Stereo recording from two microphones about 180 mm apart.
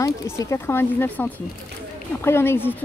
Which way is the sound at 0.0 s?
15° left (ahead or behind).